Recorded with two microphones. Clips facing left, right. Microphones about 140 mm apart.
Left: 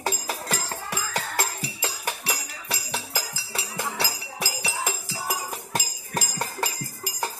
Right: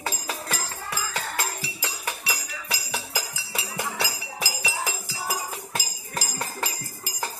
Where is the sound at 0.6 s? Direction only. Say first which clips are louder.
Left 1 dB; 40° left (ahead or behind).